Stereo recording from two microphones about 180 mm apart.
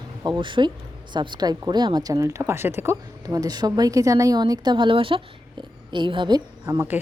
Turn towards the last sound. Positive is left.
turn(degrees=-10)  # may be behind; listen again after turning